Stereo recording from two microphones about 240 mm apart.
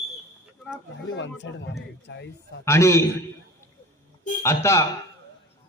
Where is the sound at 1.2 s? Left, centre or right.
Left.